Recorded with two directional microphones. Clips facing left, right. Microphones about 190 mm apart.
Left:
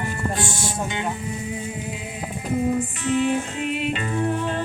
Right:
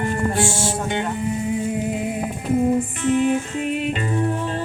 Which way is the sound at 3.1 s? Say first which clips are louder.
Right 3 dB; 50° right (ahead or behind).